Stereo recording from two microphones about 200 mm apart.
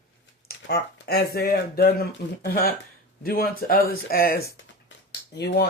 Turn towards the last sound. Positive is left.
turn(degrees=55)  # may be behind; listen again after turning